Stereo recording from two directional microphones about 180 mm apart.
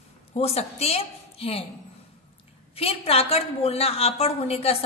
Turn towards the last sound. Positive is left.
turn(degrees=35)  # may be behind; listen again after turning